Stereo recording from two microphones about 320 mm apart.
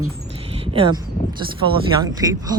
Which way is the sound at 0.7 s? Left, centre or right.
Centre.